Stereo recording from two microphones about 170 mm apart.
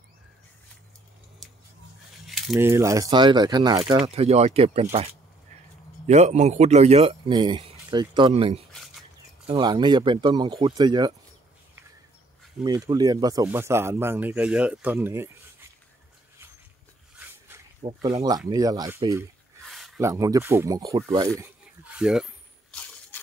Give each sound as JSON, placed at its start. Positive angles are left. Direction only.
{"t": 1.4, "sound": "scissors", "side_deg": 0}
{"t": 2.2, "sound": "keys jangling", "side_deg": 0}
{"t": 2.5, "sound": "speech", "side_deg": -15}
{"t": 4.0, "sound": "a man's voice", "side_deg": -35}
{"t": 6.0, "sound": "a man's voice", "side_deg": -40}
{"t": 7.2, "sound": "speech", "side_deg": -25}
{"t": 12.6, "sound": "speech", "side_deg": -25}
{"t": 17.8, "sound": "speech", "side_deg": -25}
{"t": 19.6, "sound": "a sound", "side_deg": 0}
{"t": 20.0, "sound": "speech", "side_deg": -20}
{"t": 21.4, "sound": "a sound", "side_deg": -5}